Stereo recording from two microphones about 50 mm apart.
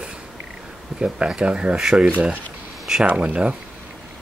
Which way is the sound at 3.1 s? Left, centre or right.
Right.